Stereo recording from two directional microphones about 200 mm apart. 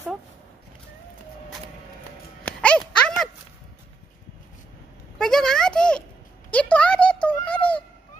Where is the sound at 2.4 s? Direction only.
5° left (ahead or behind).